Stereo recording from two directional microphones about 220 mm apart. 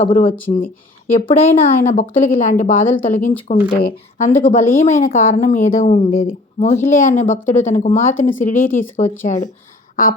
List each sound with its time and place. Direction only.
0.0 s a woman's voice: 35° left (ahead or behind)
8.5 s speech: 10° left (ahead or behind)
9.2 s a woman's voice: 35° left (ahead or behind)
9.9 s a sound: 40° left (ahead or behind)